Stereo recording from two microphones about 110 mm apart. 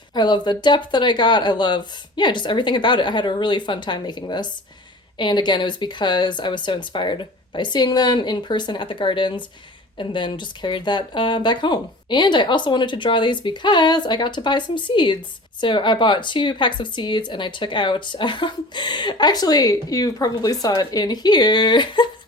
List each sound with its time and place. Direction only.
0.1 s speech: 40° left (ahead or behind)